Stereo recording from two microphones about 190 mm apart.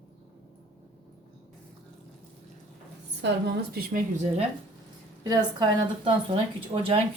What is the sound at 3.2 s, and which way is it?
A woman's voice, 60° right (ahead or behind).